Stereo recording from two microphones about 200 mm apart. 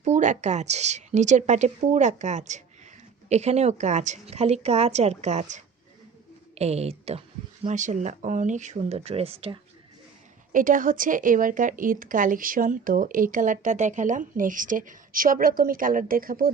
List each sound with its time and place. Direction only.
0.0 s a woman's voice: 40° right (ahead or behind)
10.5 s a woman's voice: 45° right (ahead or behind)